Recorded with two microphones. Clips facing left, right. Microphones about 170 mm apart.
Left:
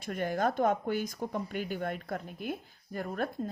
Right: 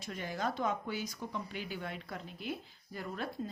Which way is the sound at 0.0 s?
55° left (ahead or behind).